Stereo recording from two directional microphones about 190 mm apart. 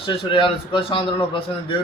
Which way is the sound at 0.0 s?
25° left (ahead or behind).